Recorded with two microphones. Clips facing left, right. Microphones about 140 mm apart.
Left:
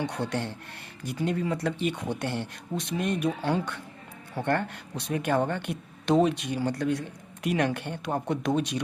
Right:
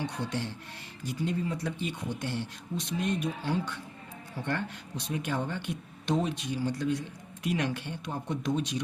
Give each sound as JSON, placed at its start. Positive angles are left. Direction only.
{"t": 0.0, "sound": "speech", "side_deg": 60}